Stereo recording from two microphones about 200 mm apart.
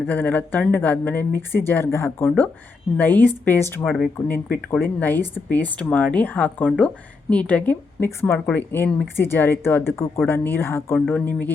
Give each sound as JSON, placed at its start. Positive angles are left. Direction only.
{"t": 0.1, "sound": "speech", "side_deg": 10}
{"t": 4.3, "sound": "speech", "side_deg": 45}
{"t": 4.9, "sound": "speech", "side_deg": 10}